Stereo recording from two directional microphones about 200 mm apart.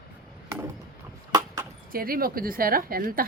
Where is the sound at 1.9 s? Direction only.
45° right (ahead or behind).